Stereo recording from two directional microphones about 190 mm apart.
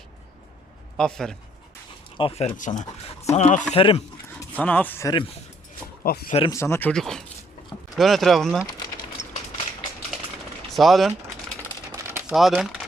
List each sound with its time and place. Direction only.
0.9 s speech: 5° left (ahead or behind)
2.1 s speech: 30° left (ahead or behind)
4.4 s speech: 10° left (ahead or behind)
6.0 s speech: 50° left (ahead or behind)
6.5 s speech: 15° left (ahead or behind)
10.7 s speech: centre (ahead or behind)
11.9 s typewriter: 15° right (ahead or behind)
12.3 s speech: centre (ahead or behind)